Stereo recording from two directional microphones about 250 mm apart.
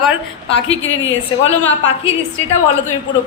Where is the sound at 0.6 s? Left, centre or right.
Left.